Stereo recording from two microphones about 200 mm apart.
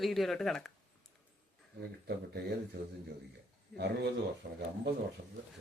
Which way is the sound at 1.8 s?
55° right (ahead or behind).